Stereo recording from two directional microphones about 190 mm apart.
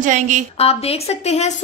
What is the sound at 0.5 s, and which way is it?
A woman's voice, 30° left (ahead or behind).